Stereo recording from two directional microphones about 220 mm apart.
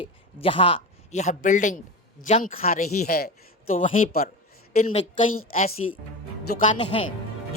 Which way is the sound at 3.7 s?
30° left (ahead or behind).